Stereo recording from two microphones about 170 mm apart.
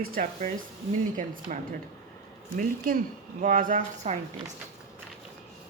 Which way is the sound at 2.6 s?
50° right (ahead or behind).